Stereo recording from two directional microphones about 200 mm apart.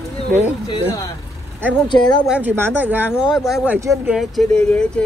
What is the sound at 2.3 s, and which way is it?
Speech, 10° right (ahead or behind).